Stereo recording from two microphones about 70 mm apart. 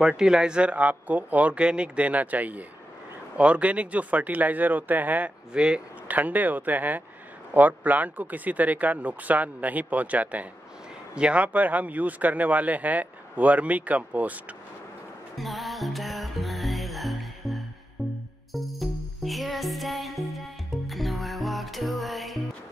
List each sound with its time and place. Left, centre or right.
0.0 s speech: centre
5.5 s speech: centre
15.3 s music: centre